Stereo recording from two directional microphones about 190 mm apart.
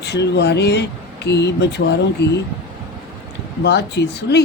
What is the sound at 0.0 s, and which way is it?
Speech, 65° left (ahead or behind).